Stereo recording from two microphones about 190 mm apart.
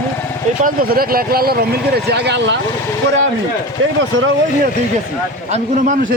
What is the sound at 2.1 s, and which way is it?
Speech, 65° right (ahead or behind).